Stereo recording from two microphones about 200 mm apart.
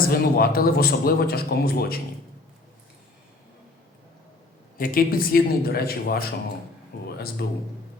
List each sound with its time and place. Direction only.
0.0 s speech: 50° left (ahead or behind)
4.8 s speech: 45° left (ahead or behind)
7.4 s speech: 55° left (ahead or behind)